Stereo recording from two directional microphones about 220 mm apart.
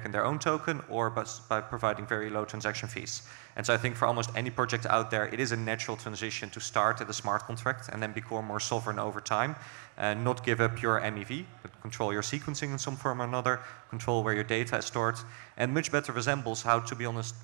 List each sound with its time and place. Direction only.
0.0 s a man's voice: 15° right (ahead or behind)
8.3 s a man's voice: 20° right (ahead or behind); by 12.9 s 5° right (ahead or behind)
13.0 s a man's voice: 15° right (ahead or behind)